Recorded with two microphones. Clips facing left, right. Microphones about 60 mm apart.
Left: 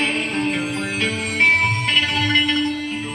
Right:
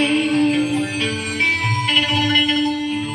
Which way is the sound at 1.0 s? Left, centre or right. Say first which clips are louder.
Left 2 dB; left.